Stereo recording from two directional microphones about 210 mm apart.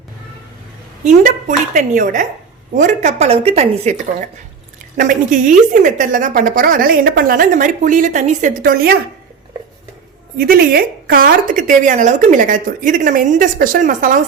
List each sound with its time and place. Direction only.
1.0 s speech: 35° right (ahead or behind)
10.3 s speech: 45° right (ahead or behind)